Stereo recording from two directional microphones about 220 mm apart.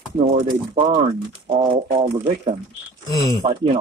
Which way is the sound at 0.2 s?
30° right (ahead or behind).